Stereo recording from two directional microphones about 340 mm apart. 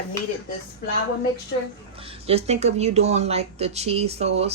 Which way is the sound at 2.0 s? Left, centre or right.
Centre.